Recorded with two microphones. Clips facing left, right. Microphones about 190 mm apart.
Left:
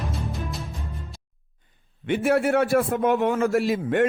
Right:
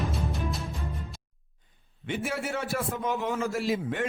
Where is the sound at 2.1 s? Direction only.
60° left (ahead or behind).